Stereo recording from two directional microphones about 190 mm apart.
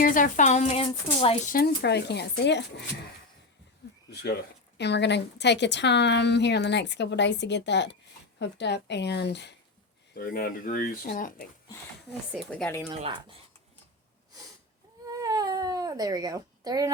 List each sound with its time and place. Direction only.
0.0 s speech: 45° left (ahead or behind); by 1.4 s 30° left (ahead or behind)
1.5 s a woman's voice: 60° left (ahead or behind)
4.1 s a woman's voice: 60° left (ahead or behind)
10.2 s speech: 50° left (ahead or behind)
12.3 s speech: 5° left (ahead or behind)
12.9 s speech: 25° right (ahead or behind)
15.0 s a sound: 20° right (ahead or behind)